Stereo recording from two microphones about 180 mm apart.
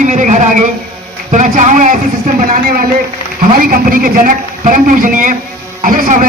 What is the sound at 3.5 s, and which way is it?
A man's voice, 50° right (ahead or behind).